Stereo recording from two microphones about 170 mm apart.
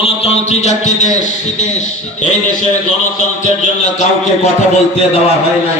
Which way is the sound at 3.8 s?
40° left (ahead or behind).